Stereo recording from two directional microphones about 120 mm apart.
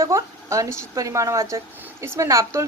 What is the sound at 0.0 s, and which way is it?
A woman's voice, 25° right (ahead or behind).